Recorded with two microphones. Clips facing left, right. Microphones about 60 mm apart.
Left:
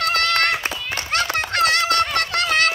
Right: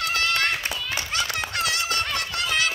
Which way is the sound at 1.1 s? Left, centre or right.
Left.